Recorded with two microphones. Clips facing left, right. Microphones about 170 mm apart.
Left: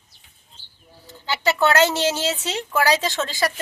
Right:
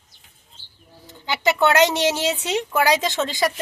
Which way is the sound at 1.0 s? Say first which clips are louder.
Right 1 dB; 20° right (ahead or behind).